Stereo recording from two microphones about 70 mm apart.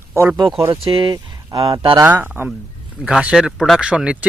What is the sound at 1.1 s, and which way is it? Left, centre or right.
Speech, right.